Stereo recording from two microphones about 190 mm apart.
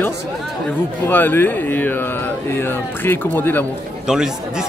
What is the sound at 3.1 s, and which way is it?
Speech, 10° left (ahead or behind).